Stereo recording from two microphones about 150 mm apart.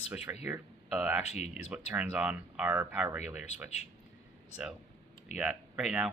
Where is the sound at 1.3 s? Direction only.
45° left (ahead or behind).